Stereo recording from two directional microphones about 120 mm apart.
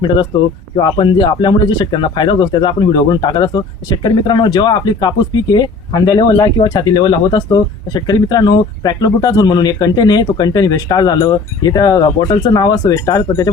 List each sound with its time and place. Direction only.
0.8 s speech: 40° left (ahead or behind)